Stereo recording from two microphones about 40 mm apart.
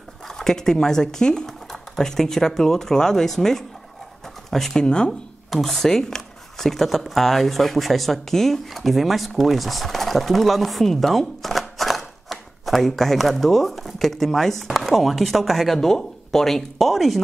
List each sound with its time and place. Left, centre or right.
0.3 s speech: centre
4.7 s speech: left
5.6 s speech: centre